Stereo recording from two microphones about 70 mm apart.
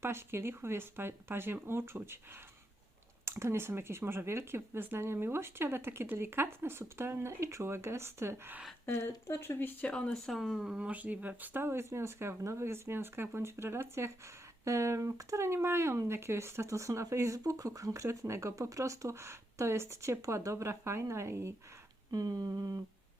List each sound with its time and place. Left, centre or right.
0.0 s speech: right
3.2 s speech: right
8.9 s speech: left
9.8 s speech: centre
10.2 s speech: centre
10.6 s speech: centre; by 21.5 s right
22.1 s speech: right